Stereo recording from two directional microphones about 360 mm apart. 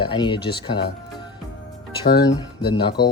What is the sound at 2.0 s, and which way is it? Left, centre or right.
Speech, centre.